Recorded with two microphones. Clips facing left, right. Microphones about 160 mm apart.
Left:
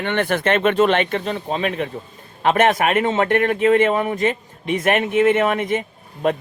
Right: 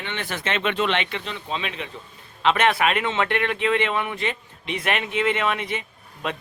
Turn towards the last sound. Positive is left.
turn(degrees=45)  # may be behind; listen again after turning